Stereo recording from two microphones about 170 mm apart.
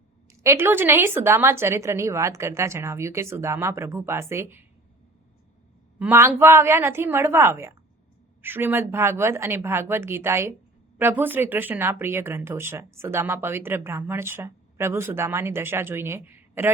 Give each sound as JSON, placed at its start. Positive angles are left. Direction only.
{"t": 0.4, "sound": "speech", "side_deg": -15}
{"t": 6.0, "sound": "speech", "side_deg": -10}